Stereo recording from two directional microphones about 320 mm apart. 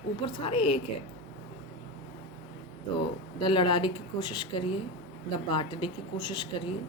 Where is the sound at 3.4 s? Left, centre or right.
Centre.